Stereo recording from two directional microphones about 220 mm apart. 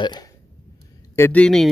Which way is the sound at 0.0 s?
20° left (ahead or behind).